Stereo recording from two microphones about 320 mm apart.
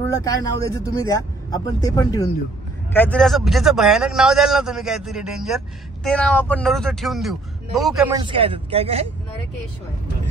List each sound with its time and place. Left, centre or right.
0.0 s a man's voice: centre
8.2 s speech: centre